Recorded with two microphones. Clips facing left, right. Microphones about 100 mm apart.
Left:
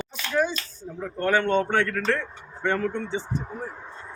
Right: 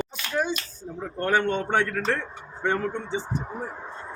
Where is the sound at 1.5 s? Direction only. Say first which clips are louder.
Left 2 dB; 15° right (ahead or behind).